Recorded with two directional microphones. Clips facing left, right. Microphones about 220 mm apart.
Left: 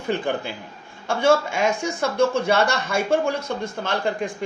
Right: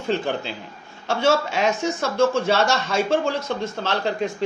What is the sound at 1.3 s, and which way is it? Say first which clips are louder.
Speech: left 2 dB; 50° left (ahead or behind).